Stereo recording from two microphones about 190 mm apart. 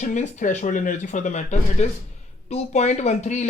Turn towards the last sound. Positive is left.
turn(degrees=35)  # may be behind; listen again after turning